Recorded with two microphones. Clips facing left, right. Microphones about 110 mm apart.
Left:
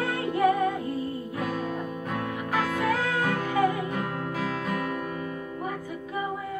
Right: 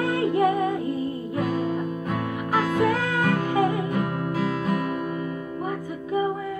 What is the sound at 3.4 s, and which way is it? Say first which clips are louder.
Music: right 2 dB; 20° right (ahead or behind).